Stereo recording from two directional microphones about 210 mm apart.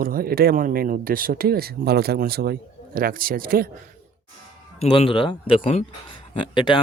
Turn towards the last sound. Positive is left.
turn(degrees=20)  # may be behind; listen again after turning